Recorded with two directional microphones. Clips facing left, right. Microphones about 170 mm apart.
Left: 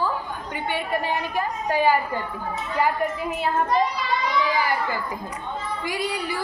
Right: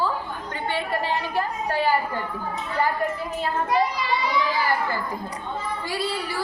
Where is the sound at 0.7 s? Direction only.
15° left (ahead or behind).